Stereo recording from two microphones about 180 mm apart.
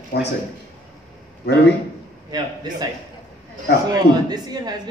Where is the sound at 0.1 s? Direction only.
65° left (ahead or behind).